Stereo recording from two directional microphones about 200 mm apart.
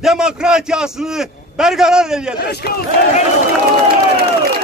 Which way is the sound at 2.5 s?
55° left (ahead or behind).